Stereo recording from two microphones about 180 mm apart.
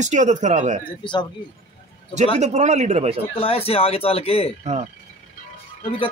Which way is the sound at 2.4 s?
40° right (ahead or behind).